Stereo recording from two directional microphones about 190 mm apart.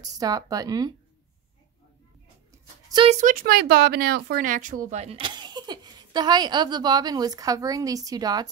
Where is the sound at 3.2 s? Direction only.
45° right (ahead or behind).